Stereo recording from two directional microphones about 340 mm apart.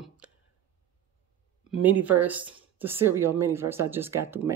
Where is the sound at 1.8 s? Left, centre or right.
Centre.